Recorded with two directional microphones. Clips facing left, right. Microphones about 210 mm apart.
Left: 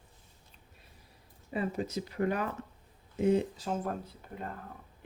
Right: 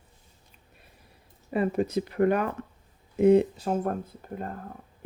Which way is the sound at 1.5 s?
60° right (ahead or behind).